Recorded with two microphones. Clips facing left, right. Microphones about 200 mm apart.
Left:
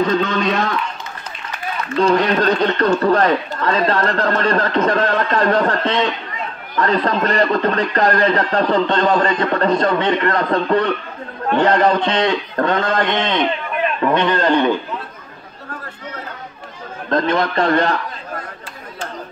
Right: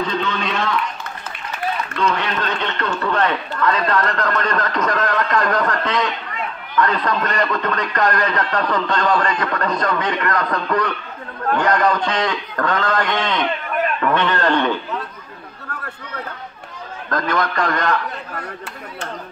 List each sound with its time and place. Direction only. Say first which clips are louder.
0.2 s a man's voice: left 5 dB; 40° left (ahead or behind)
2.0 s a man's voice: left 9 dB; 35° left (ahead or behind); by 14.7 s 15° left (ahead or behind)
17.1 s a man's voice: left 4 dB; 25° left (ahead or behind)